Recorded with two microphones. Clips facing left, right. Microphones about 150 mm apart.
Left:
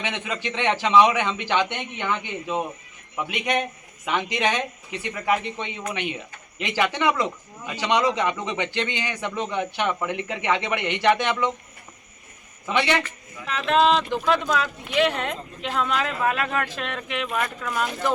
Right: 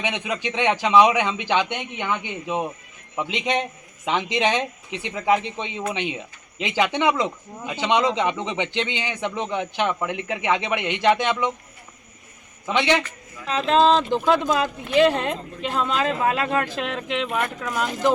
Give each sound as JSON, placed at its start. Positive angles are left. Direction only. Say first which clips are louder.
{"t": 0.0, "sound": "a man's voice", "louder": "right 3 dB", "side_deg": -15}
{"t": 12.6, "sound": "a man's voice", "louder": "right 2 dB", "side_deg": -15}
{"t": 13.7, "sound": "speech", "louder": "right 2 dB", "side_deg": -35}